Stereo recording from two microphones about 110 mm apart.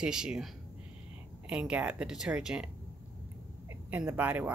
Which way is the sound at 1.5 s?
10° right (ahead or behind).